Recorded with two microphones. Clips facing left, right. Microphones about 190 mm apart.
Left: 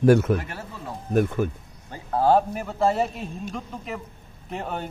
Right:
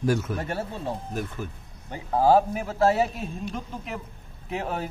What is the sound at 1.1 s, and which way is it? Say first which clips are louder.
Speech: left 10 dB; 60° left (ahead or behind).